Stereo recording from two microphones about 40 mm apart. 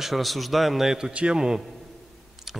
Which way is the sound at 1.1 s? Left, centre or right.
Right.